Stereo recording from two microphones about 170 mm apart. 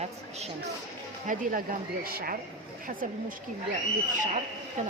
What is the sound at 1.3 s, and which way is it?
Speech, 50° right (ahead or behind).